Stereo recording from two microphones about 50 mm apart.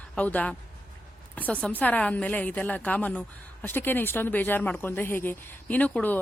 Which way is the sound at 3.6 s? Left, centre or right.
Left.